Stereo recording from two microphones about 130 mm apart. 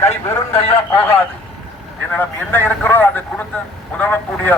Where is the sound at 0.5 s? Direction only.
50° left (ahead or behind).